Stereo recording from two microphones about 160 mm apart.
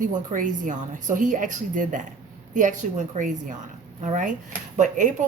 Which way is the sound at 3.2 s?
50° right (ahead or behind).